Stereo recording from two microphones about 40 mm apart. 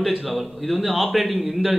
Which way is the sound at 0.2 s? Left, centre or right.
Centre.